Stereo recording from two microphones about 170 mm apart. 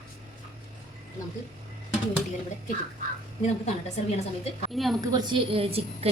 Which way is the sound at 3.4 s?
40° left (ahead or behind).